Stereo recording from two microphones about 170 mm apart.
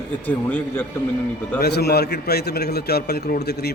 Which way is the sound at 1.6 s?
70° left (ahead or behind).